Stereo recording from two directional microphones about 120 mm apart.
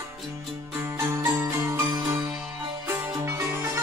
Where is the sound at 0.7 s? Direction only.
20° right (ahead or behind).